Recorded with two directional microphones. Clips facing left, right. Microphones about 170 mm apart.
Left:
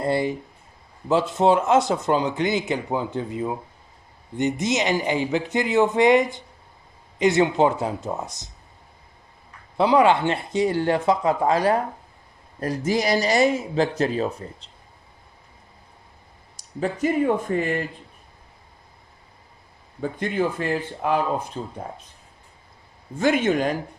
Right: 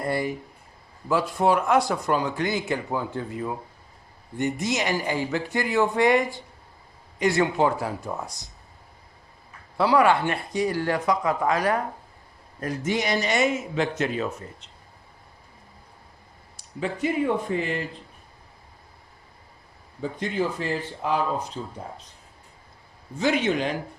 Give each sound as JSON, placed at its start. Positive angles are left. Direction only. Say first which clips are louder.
{"t": 0.0, "sound": "speech", "louder": "left 4 dB", "side_deg": 25}
{"t": 9.7, "sound": "speech", "louder": "left 2 dB", "side_deg": 20}
{"t": 16.6, "sound": "speech", "louder": "left 3 dB", "side_deg": 40}
{"t": 20.0, "sound": "speech", "louder": "left 3 dB", "side_deg": 55}
{"t": 23.1, "sound": "speech", "louder": "left 3 dB", "side_deg": 50}